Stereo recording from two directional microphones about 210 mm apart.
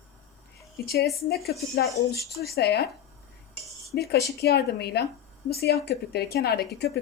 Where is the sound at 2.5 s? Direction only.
50° left (ahead or behind).